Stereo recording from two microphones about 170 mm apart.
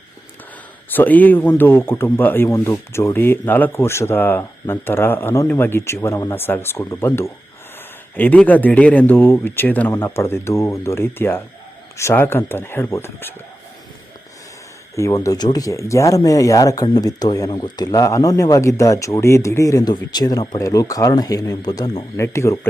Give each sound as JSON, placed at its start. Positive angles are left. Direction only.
{"t": 0.9, "sound": "speech", "side_deg": 10}
{"t": 14.9, "sound": "speech", "side_deg": 20}